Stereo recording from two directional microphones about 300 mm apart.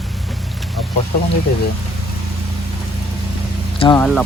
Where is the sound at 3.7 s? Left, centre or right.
Centre.